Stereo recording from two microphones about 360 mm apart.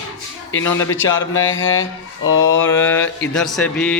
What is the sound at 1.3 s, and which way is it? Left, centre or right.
Speech, left.